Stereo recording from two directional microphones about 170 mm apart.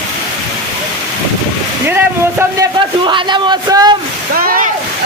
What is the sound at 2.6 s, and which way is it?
A man's voice, 30° right (ahead or behind).